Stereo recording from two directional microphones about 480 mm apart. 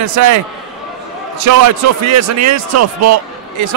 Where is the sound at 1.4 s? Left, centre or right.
Right.